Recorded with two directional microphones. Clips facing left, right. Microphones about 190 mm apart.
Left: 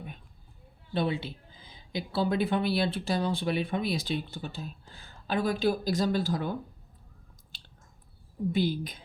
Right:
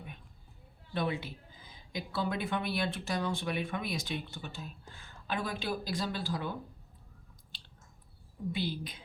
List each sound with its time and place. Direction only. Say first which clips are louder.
0.9 s speech: left 4 dB; 30° left (ahead or behind)
8.5 s a woman's voice: left 8 dB; 45° left (ahead or behind)